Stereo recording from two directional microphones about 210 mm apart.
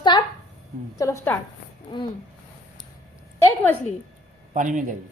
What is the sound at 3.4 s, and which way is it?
Speech, 10° left (ahead or behind).